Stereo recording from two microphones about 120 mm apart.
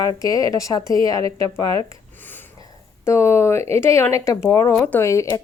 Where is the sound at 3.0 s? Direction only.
20° left (ahead or behind).